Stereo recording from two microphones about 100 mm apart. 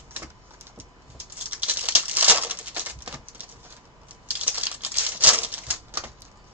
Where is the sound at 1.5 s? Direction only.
15° right (ahead or behind).